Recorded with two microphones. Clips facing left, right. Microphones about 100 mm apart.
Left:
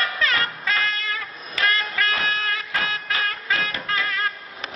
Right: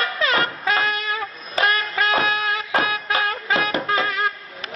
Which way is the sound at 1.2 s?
25° right (ahead or behind).